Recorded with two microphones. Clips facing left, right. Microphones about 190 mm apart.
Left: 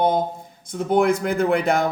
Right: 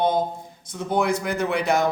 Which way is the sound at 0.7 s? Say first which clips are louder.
Left 4 dB; 55° left (ahead or behind).